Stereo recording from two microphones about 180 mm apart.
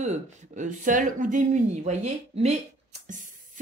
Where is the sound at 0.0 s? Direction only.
40° right (ahead or behind).